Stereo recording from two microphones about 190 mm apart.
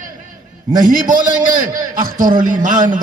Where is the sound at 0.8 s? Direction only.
45° right (ahead or behind).